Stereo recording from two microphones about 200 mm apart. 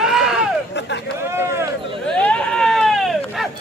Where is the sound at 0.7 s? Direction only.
60° left (ahead or behind).